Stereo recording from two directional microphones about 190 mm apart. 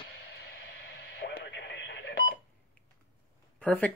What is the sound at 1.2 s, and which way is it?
Radio, 60° left (ahead or behind).